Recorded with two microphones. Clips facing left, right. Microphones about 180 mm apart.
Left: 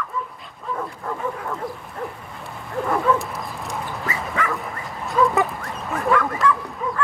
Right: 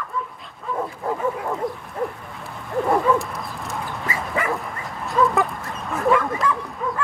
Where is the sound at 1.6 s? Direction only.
Centre (ahead or behind).